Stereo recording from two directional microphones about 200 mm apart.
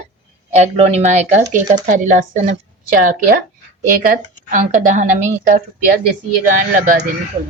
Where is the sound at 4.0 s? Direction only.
45° right (ahead or behind).